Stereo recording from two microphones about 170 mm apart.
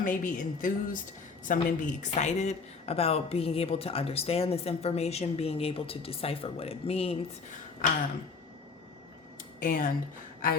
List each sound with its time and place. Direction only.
0.0 s a woman's voice: 50° left (ahead or behind); by 7.6 s 35° left (ahead or behind)
7.8 s speech: 55° left (ahead or behind)
9.6 s speech: 55° left (ahead or behind)